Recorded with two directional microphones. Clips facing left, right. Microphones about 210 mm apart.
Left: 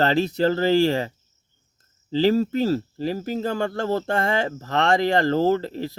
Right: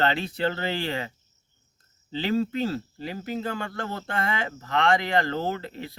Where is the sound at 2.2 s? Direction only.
40° left (ahead or behind).